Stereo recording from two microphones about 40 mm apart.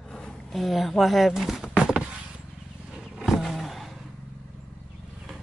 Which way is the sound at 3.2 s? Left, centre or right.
Centre.